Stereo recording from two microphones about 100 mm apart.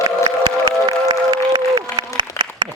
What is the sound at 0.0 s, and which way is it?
Music, 55° right (ahead or behind).